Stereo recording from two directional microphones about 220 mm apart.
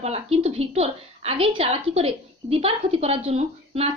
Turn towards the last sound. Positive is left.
turn(degrees=-30)  # may be behind; listen again after turning